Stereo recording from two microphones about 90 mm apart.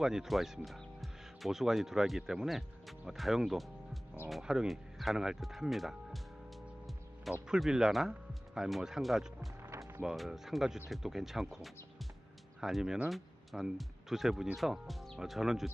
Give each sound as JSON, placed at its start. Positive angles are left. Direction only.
{"t": 0.0, "sound": "speech", "side_deg": -5}
{"t": 7.4, "sound": "speech", "side_deg": -5}
{"t": 9.6, "sound": "music", "side_deg": -35}
{"t": 10.0, "sound": "speech", "side_deg": -5}